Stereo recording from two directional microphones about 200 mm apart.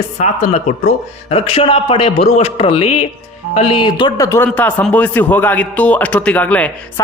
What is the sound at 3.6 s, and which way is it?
A man's voice, 25° left (ahead or behind).